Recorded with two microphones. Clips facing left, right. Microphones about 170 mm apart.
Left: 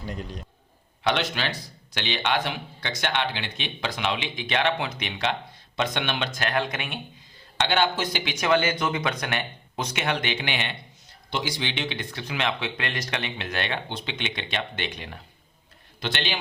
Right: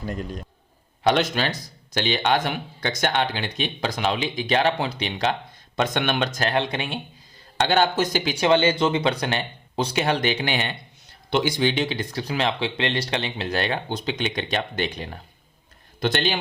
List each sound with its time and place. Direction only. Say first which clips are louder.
0.1 s a man's voice: right 4 dB; 45° right (ahead or behind)
5.7 s speech: right 4 dB; 45° right (ahead or behind)
6.5 s a man's voice: right 3 dB; 30° right (ahead or behind)
7.6 s a man's voice: right 4 dB; 40° right (ahead or behind)
11.3 s a man's voice: right 8 dB; 60° right (ahead or behind)